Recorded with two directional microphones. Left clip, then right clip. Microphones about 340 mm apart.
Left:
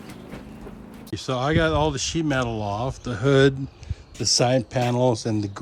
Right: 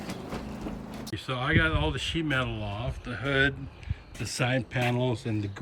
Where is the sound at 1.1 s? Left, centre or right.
Centre.